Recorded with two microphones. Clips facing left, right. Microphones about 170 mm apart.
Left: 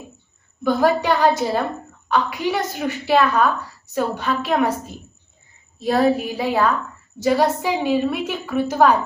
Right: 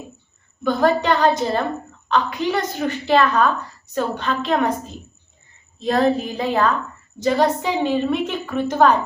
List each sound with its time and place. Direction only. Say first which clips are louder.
0.6 s a woman's voice: even; 10° left (ahead or behind)
5.8 s a woman's voice: left 1 dB; 5° left (ahead or behind)